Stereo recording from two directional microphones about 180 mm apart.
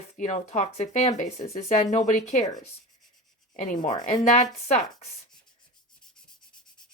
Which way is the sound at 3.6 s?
45° left (ahead or behind).